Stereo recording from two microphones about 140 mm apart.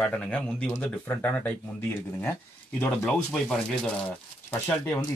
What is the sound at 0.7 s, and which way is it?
Speech, 15° left (ahead or behind).